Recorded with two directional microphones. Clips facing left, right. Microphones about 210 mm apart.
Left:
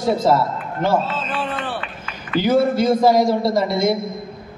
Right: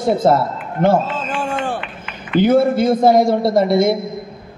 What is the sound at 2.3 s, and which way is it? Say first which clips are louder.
A man's voice: right 3 dB; 55° right (ahead or behind).